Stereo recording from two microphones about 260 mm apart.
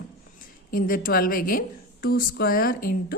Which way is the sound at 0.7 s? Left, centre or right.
Left.